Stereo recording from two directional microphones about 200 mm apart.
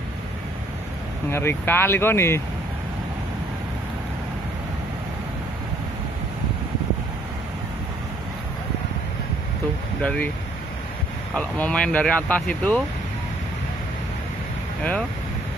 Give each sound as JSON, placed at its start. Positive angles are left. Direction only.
{"t": 1.3, "sound": "speech", "side_deg": 10}
{"t": 10.0, "sound": "speech", "side_deg": 5}
{"t": 11.3, "sound": "speech", "side_deg": 5}
{"t": 14.8, "sound": "speech", "side_deg": 5}